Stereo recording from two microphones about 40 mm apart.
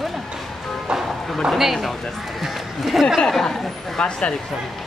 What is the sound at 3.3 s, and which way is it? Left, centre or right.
Speech, centre.